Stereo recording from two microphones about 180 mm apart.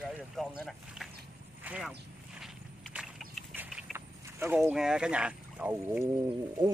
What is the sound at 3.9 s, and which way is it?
Speech, 15° right (ahead or behind).